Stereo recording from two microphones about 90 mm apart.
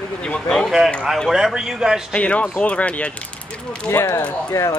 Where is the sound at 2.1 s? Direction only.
15° left (ahead or behind).